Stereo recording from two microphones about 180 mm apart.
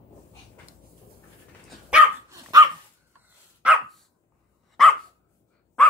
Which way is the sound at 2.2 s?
20° right (ahead or behind).